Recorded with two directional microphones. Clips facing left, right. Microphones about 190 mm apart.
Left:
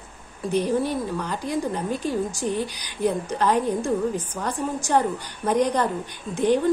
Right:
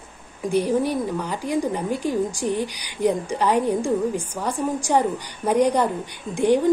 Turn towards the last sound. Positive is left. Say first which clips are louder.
# right 2 dB
turn(degrees=-15)  # may be behind; listen again after turning